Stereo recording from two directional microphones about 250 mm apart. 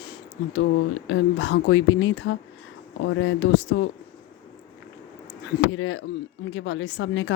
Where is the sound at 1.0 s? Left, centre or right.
Left.